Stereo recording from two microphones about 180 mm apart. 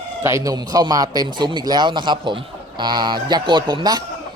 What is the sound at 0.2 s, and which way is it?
Speech, 15° right (ahead or behind).